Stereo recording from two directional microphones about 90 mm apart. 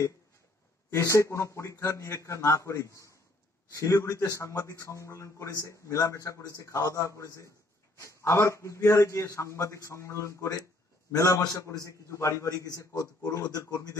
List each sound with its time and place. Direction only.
0.8 s a man's voice: 30° left (ahead or behind)